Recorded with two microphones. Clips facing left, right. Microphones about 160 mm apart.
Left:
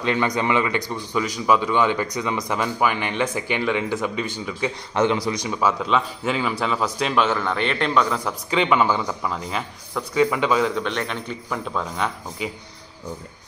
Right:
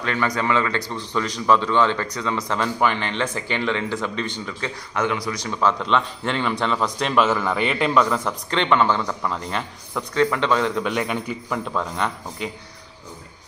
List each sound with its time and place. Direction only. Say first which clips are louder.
0.0 s speech: left 2 dB; 20° left (ahead or behind)
4.9 s speech: left 3 dB; 25° left (ahead or behind)
5.4 s a man's voice: even; 10° left (ahead or behind)